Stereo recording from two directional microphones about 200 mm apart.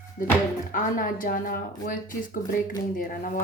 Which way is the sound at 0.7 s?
40° left (ahead or behind).